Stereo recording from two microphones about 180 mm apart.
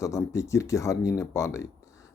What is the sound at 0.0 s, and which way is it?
Speech, 15° left (ahead or behind).